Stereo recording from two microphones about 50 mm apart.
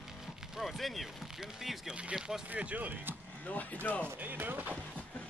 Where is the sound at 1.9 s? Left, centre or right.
Right.